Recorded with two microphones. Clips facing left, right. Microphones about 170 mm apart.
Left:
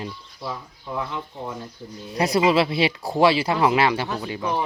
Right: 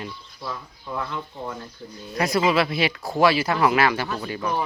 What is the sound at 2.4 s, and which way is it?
Speech, 30° left (ahead or behind).